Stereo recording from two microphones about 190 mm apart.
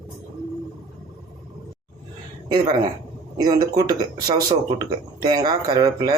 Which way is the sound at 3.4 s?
20° right (ahead or behind).